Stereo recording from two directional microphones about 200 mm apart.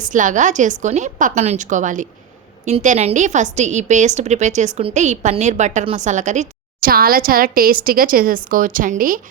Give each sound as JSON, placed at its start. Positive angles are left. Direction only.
{"t": 0.0, "sound": "a woman's voice", "side_deg": -40}